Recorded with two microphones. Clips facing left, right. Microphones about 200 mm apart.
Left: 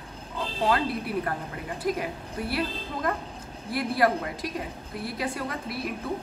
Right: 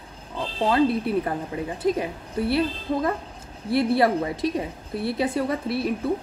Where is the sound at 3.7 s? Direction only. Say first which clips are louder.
Right 5 dB; 25° right (ahead or behind).